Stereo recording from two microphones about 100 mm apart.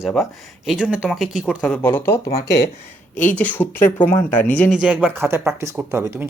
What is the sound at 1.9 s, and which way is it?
Speech, 25° left (ahead or behind).